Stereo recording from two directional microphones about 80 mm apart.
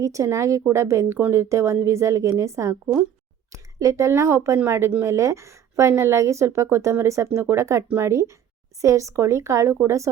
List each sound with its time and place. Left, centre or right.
0.0 s speech: right